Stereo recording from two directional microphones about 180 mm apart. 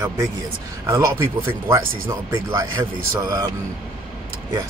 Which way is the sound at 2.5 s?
20° right (ahead or behind).